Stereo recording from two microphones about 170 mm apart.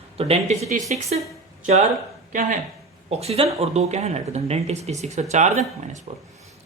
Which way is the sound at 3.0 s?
35° right (ahead or behind).